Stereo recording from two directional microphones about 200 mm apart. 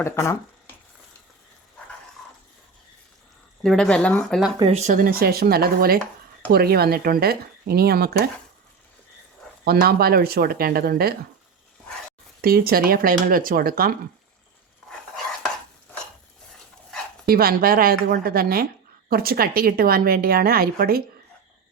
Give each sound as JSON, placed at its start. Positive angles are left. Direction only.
{"t": 0.0, "sound": "speech", "side_deg": 15}
{"t": 3.6, "sound": "speech", "side_deg": 5}
{"t": 4.6, "sound": "a woman's voice", "side_deg": -35}
{"t": 9.6, "sound": "a woman's voice", "side_deg": -50}
{"t": 12.4, "sound": "a woman's voice", "side_deg": -50}
{"t": 14.8, "sound": "dog", "side_deg": 5}
{"t": 17.2, "sound": "a woman's voice", "side_deg": -50}